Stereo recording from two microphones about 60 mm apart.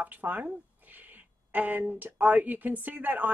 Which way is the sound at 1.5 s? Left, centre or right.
Right.